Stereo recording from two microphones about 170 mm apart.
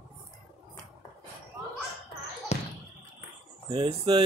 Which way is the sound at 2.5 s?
40° left (ahead or behind).